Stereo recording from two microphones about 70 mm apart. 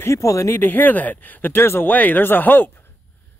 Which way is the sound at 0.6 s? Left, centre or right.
Left.